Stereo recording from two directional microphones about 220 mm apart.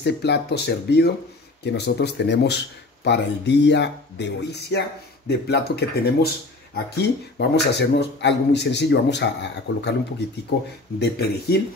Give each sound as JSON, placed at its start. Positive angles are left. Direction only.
{"t": 0.0, "sound": "speech", "side_deg": 50}
{"t": 11.0, "sound": "speech", "side_deg": 45}